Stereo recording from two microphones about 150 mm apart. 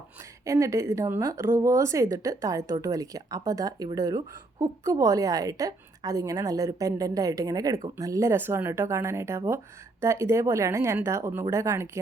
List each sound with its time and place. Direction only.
0.4 s a woman's voice: 20° right (ahead or behind)